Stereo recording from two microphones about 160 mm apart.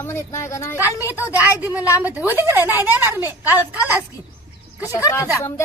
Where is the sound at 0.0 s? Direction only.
15° left (ahead or behind).